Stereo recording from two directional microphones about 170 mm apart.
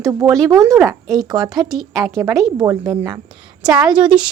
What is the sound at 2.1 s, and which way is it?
Speech, 15° right (ahead or behind).